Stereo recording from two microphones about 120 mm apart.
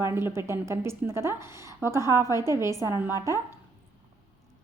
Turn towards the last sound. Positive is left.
turn(degrees=-25)  # may be behind; listen again after turning